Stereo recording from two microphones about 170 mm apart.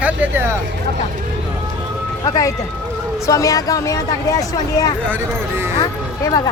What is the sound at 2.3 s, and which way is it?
Speech, 25° left (ahead or behind).